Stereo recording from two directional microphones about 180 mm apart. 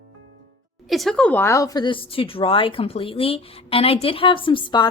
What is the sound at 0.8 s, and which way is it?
Speech, centre (ahead or behind).